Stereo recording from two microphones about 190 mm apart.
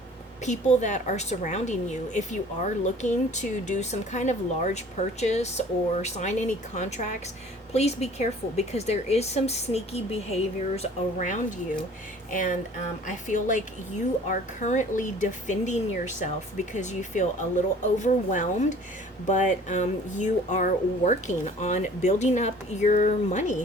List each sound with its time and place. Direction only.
0.4 s speech: 40° left (ahead or behind)